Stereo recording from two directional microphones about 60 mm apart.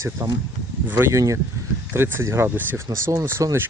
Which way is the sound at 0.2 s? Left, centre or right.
Right.